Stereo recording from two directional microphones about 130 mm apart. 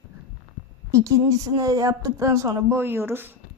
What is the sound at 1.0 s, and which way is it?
Speech, 25° right (ahead or behind).